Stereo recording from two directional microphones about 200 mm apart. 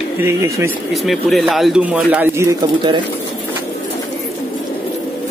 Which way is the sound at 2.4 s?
25° right (ahead or behind).